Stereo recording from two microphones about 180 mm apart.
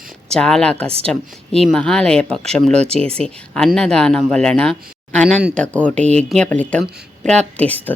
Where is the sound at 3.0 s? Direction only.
35° right (ahead or behind).